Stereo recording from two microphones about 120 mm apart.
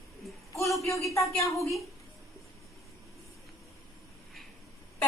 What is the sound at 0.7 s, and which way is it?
Speech, 25° left (ahead or behind).